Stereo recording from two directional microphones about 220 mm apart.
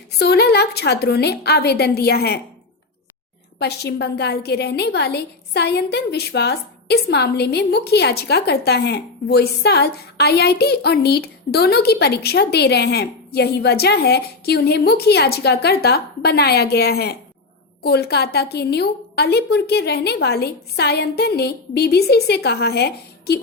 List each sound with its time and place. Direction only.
0.1 s a woman's voice: 50° left (ahead or behind)
3.6 s a woman's voice: 50° left (ahead or behind)